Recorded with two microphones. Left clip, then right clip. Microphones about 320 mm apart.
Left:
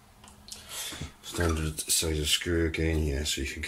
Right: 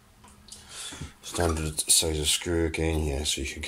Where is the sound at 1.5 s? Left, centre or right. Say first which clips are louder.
Right 4 dB; centre.